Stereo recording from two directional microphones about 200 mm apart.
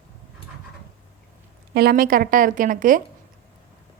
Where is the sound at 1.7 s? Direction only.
50° right (ahead or behind).